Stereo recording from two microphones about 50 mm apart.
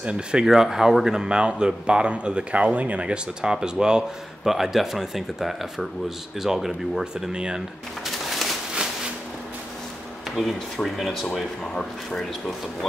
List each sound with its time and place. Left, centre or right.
0.0 s speech: centre
3.8 s a man's voice: centre
7.3 s speech: centre
8.0 s a sound: centre
10.3 s a man's voice: centre